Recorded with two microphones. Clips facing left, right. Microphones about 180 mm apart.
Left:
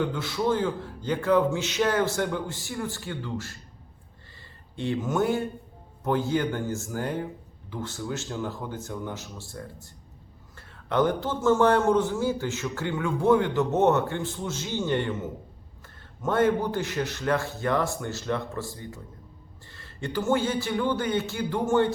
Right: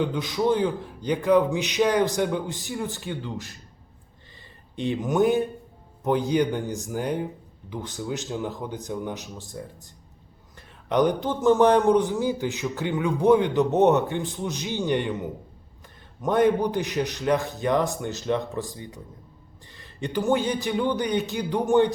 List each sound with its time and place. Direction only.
0.0 s a man's voice: 15° right (ahead or behind)
4.8 s a man's voice: 15° right (ahead or behind)
10.8 s a man's voice: 15° right (ahead or behind)